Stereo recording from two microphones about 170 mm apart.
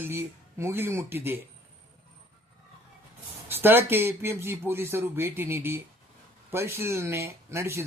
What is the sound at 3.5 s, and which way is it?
Speech, 10° right (ahead or behind).